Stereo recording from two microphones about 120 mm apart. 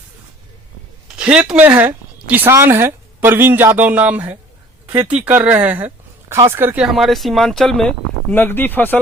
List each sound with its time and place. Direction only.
1.0 s a sound: 10° right (ahead or behind)
2.5 s speech: 20° right (ahead or behind)
6.8 s speech: centre (ahead or behind); by 9.0 s 15° left (ahead or behind)